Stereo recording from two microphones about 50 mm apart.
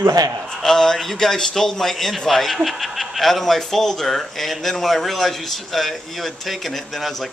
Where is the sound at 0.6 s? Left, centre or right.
Centre.